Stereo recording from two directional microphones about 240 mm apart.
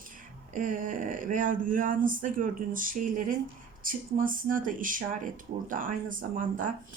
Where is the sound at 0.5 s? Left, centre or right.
Right.